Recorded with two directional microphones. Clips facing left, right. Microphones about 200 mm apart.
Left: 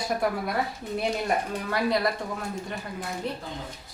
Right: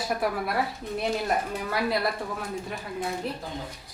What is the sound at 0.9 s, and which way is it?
Speech, centre (ahead or behind).